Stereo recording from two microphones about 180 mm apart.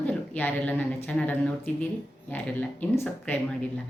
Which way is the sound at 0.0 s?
10° left (ahead or behind).